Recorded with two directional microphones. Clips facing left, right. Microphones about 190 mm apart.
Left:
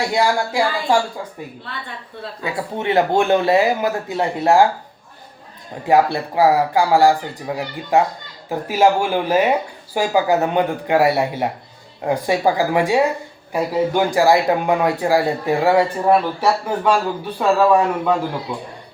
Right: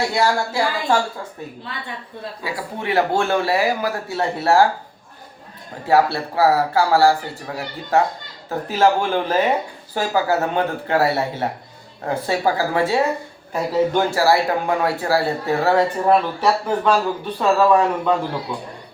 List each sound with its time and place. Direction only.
0.1 s speech: 15° left (ahead or behind)
2.4 s speech: 20° left (ahead or behind)
5.8 s speech: 15° left (ahead or behind)